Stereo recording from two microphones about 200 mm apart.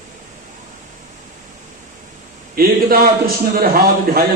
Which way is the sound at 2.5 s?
50° right (ahead or behind).